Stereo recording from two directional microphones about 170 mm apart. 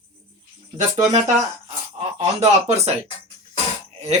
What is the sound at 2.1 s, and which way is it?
Speech, 40° right (ahead or behind).